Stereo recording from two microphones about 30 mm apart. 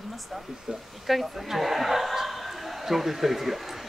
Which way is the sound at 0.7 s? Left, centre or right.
Centre.